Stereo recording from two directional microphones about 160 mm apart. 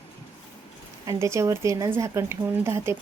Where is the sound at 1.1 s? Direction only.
20° right (ahead or behind).